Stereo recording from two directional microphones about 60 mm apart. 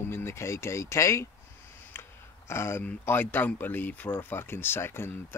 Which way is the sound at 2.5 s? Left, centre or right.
Left.